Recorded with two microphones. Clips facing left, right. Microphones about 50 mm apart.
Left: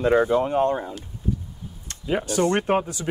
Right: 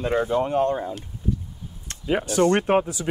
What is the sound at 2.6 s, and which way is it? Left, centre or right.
Speech, centre.